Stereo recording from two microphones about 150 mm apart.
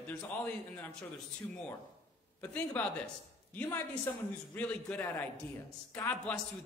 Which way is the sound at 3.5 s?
20° left (ahead or behind).